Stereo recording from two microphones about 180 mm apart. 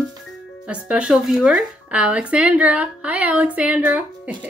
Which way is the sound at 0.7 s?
5° right (ahead or behind).